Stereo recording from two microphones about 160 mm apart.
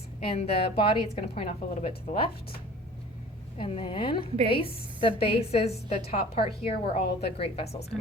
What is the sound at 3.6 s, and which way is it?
A woman's voice, 35° left (ahead or behind).